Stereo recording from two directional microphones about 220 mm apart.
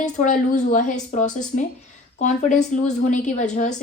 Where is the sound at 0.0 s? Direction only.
35° left (ahead or behind).